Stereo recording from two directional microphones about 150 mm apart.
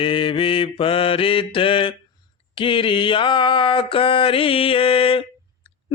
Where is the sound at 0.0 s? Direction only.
35° left (ahead or behind).